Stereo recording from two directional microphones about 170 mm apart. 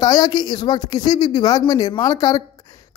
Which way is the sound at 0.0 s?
25° left (ahead or behind).